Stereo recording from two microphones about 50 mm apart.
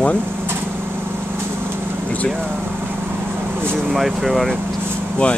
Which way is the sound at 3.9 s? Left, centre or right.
Centre.